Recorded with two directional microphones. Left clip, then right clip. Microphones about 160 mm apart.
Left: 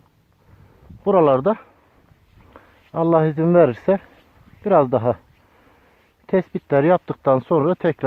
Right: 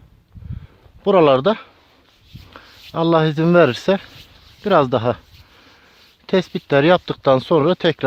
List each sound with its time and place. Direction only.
1.0 s speech: 30° right (ahead or behind)
6.2 s speech: 30° right (ahead or behind)